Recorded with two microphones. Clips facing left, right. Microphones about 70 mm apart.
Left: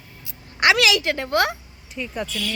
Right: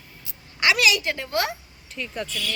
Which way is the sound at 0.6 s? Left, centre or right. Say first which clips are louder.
Left 3 dB; left.